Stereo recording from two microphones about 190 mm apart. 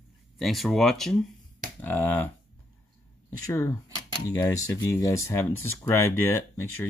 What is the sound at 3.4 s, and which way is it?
Speech, 15° left (ahead or behind).